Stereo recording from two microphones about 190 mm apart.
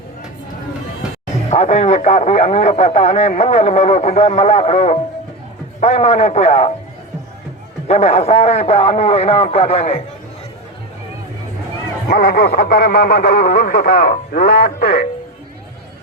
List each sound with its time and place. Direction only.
1.5 s speech: 35° left (ahead or behind)
7.9 s speech: 35° left (ahead or behind)
12.0 s speech: 50° left (ahead or behind)